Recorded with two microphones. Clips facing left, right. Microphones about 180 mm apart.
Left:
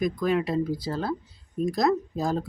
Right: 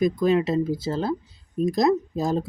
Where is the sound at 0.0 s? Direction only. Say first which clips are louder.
Right 4 dB; 25° right (ahead or behind).